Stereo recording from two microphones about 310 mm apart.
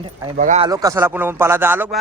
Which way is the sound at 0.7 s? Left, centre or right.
Centre.